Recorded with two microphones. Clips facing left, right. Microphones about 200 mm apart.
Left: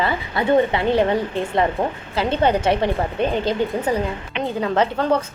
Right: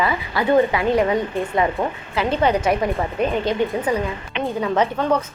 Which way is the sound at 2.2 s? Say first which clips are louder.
Even; 30° left (ahead or behind).